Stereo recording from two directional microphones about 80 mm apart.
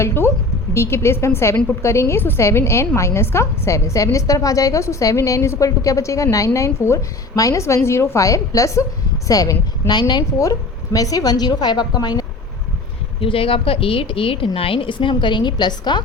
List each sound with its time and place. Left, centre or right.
0.0 s a woman's voice: left
10.3 s speech: left
14.4 s a woman's voice: left
15.2 s a woman's voice: left